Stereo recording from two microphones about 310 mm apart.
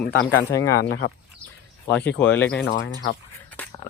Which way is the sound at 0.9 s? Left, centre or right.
Left.